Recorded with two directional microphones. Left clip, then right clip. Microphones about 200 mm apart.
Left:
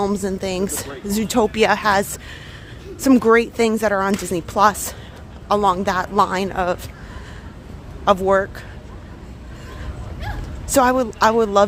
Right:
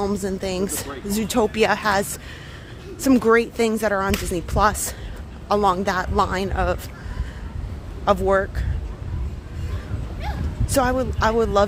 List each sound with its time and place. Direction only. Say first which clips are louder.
0.0 s speech: left 3 dB; 15° left (ahead or behind)
8.0 s speech: left 3 dB; 10° left (ahead or behind)
10.7 s a woman's voice: left 5 dB; 20° left (ahead or behind)